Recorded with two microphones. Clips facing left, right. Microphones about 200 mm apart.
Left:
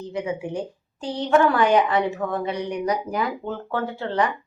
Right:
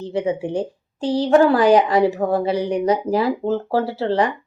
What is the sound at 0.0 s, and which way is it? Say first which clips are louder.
A woman's voice: right 6 dB; 30° right (ahead or behind).